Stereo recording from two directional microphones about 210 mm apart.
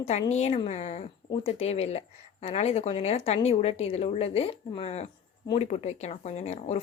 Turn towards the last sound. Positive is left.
turn(degrees=30)  # may be behind; listen again after turning